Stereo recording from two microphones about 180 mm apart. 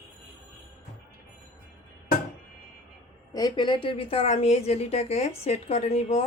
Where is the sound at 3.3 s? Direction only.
25° left (ahead or behind).